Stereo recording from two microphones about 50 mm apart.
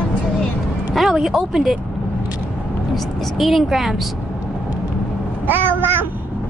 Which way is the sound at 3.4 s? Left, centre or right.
Centre.